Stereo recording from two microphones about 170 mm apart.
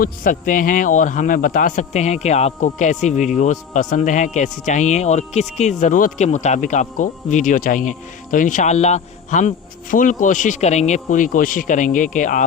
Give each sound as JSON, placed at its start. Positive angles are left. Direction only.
{"t": 0.0, "sound": "speech", "side_deg": 55}